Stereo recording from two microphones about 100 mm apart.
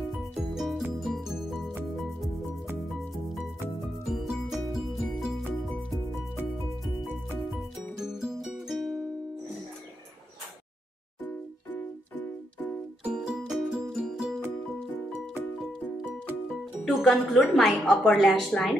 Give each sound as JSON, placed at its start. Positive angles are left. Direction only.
{"t": 0.5, "sound": "music", "side_deg": 0}
{"t": 4.1, "sound": "music", "side_deg": -5}
{"t": 8.0, "sound": "music", "side_deg": -5}
{"t": 13.0, "sound": "music", "side_deg": -10}
{"t": 16.8, "sound": "speech", "side_deg": 0}